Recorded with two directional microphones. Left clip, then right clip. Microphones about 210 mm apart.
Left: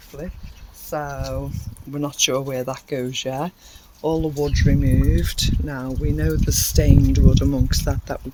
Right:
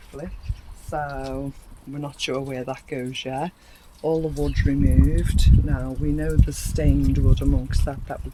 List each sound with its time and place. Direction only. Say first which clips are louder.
0.9 s speech: left 1 dB; 40° left (ahead or behind)
4.4 s speech: left 2 dB; 40° left (ahead or behind)